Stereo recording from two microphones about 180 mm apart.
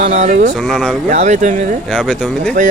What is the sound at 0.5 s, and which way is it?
Speech, 5° left (ahead or behind).